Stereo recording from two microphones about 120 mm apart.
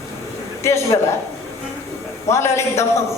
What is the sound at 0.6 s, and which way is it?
Speech, 25° left (ahead or behind).